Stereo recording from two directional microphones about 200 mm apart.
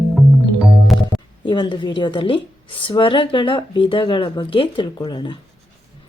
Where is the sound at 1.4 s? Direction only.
25° left (ahead or behind).